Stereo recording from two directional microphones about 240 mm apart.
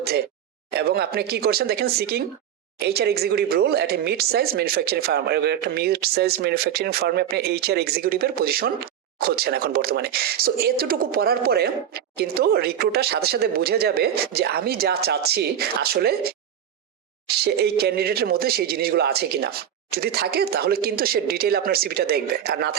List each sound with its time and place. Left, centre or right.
0.7 s speech: right